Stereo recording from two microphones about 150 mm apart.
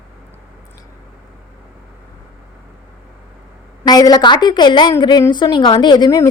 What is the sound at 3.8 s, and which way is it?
A woman's voice, 25° left (ahead or behind).